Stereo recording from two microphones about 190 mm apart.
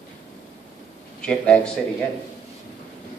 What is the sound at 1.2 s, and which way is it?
Speech, 5° left (ahead or behind).